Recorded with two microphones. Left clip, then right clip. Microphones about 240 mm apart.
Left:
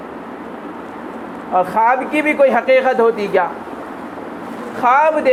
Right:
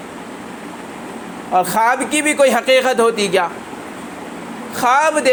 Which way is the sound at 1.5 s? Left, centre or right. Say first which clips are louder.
Left 1 dB; right.